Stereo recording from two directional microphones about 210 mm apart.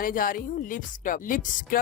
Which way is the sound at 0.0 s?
40° left (ahead or behind).